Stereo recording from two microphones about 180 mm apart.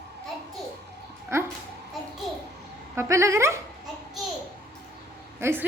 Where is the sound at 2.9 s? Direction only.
15° right (ahead or behind).